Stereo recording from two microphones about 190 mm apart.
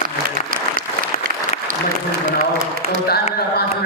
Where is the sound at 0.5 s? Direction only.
45° right (ahead or behind).